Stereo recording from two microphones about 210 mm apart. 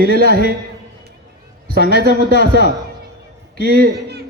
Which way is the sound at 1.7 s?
50° right (ahead or behind).